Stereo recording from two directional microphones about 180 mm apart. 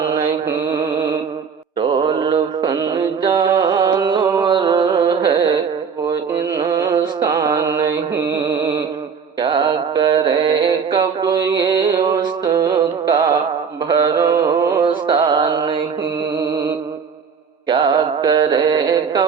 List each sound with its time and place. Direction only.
0.1 s mantra: 15° right (ahead or behind)
0.9 s mantra: 25° right (ahead or behind)
17.7 s mantra: 25° right (ahead or behind)